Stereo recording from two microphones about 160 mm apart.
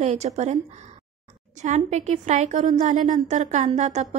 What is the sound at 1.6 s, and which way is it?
A woman's voice, 45° right (ahead or behind).